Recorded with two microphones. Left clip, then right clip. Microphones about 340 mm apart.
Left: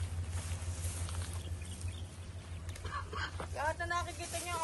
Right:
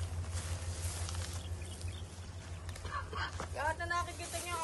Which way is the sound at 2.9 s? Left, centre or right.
Centre.